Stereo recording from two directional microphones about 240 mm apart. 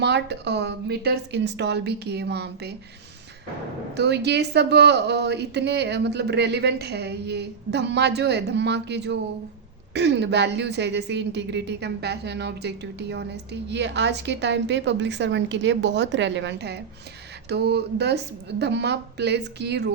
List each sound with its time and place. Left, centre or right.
0.0 s a woman's voice: right
3.9 s a woman's voice: right